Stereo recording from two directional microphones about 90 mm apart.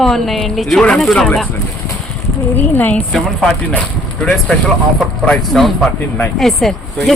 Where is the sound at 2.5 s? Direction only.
20° left (ahead or behind).